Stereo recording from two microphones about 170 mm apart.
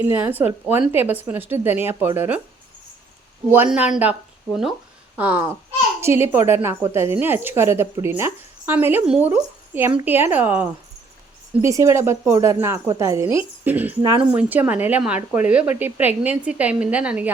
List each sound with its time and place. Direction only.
0.0 s a woman's voice: 10° right (ahead or behind)
3.5 s a woman's voice: 10° right (ahead or behind)
5.1 s a woman's voice: 10° right (ahead or behind)
14.0 s speech: 25° right (ahead or behind)
14.3 s a woman's voice: 10° right (ahead or behind)